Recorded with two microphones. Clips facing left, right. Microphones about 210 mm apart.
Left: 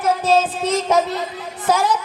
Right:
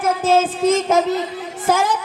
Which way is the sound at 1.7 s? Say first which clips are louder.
Even; 45° right (ahead or behind).